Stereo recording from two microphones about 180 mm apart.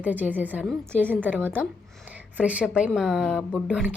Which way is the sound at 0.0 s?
10° right (ahead or behind).